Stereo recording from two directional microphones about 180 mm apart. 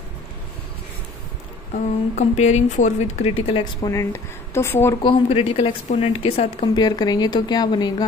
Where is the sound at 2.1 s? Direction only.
40° left (ahead or behind); by 5.0 s 15° left (ahead or behind).